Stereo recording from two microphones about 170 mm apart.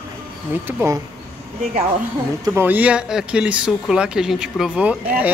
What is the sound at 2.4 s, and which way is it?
Speech, 10° right (ahead or behind).